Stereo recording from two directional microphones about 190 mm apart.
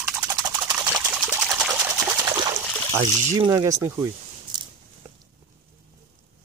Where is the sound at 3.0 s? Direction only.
20° right (ahead or behind).